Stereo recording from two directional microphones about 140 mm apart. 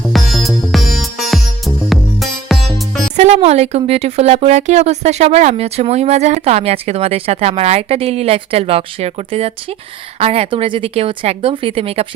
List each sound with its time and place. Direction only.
0.1 s music: centre (ahead or behind)
3.2 s a woman's voice: 50° right (ahead or behind)